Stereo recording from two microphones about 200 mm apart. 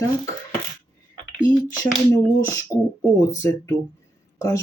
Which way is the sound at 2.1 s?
15° left (ahead or behind).